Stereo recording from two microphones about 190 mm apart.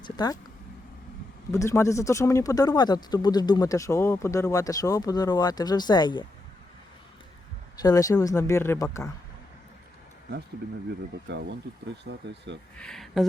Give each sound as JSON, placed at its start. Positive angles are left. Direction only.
{"t": 0.0, "sound": "a sound", "side_deg": 20}
{"t": 1.5, "sound": "speech", "side_deg": 15}
{"t": 7.8, "sound": "speech", "side_deg": 20}
{"t": 11.3, "sound": "speech", "side_deg": -70}
{"t": 12.7, "sound": "speech", "side_deg": 5}